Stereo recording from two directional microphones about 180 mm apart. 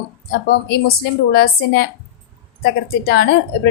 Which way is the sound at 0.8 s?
60° left (ahead or behind).